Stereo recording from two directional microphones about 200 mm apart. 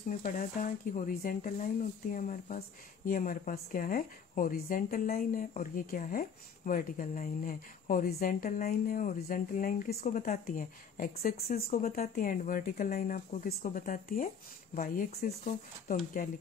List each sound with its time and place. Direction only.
0.2 s speech: 40° left (ahead or behind)